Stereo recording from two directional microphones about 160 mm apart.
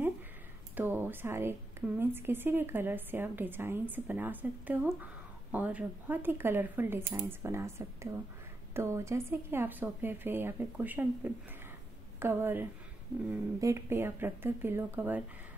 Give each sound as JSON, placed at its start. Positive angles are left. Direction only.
{"t": 0.7, "sound": "a woman's voice", "side_deg": -10}